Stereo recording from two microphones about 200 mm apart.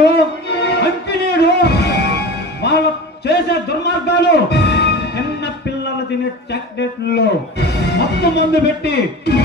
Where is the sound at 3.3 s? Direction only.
55° left (ahead or behind).